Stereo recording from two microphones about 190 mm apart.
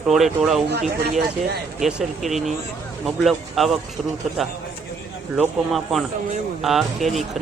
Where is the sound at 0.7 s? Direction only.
60° right (ahead or behind).